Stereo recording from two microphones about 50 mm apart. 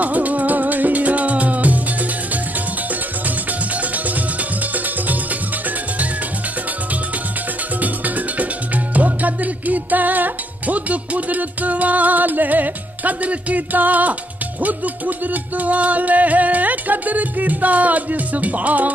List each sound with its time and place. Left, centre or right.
0.0 s music: right
7.8 s music: right